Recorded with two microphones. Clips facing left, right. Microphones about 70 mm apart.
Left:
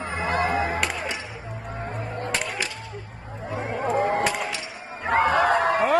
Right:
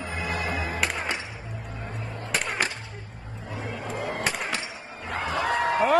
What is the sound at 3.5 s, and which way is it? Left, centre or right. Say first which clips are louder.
Chatter: left 8 dB; left.